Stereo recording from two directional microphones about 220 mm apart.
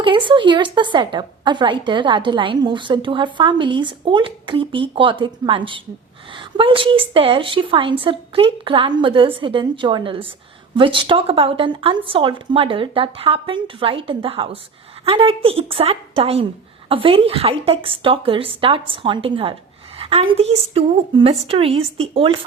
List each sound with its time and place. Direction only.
0.0 s a woman's voice: 20° right (ahead or behind)